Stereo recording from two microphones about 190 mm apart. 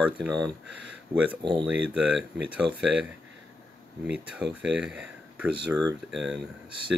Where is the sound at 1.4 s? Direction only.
25° right (ahead or behind).